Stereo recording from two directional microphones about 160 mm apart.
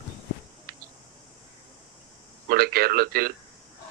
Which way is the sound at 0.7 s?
70° right (ahead or behind).